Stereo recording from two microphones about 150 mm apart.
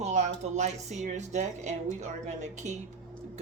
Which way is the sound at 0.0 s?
50° right (ahead or behind).